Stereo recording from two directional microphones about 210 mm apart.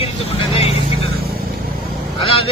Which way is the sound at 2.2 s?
25° left (ahead or behind).